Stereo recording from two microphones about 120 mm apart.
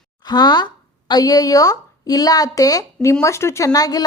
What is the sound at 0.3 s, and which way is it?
A woman's voice, 35° left (ahead or behind).